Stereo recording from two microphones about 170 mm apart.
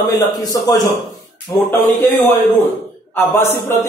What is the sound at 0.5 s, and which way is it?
A man's voice, 20° left (ahead or behind).